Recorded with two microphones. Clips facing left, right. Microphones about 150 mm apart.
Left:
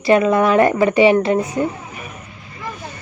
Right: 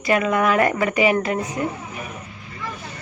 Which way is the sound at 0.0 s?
30° left (ahead or behind).